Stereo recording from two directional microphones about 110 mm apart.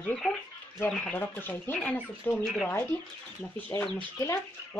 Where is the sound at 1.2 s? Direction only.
20° left (ahead or behind).